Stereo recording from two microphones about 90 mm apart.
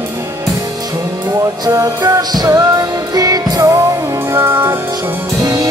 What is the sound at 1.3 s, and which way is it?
Music, 35° right (ahead or behind).